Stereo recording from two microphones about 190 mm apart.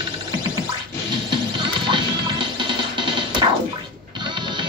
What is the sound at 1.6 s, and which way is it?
Music, 25° right (ahead or behind).